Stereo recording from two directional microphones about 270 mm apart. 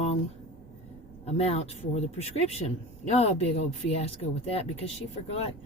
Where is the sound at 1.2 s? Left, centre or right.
Left.